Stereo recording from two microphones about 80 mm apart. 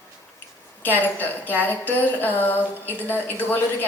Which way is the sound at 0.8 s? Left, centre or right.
Left.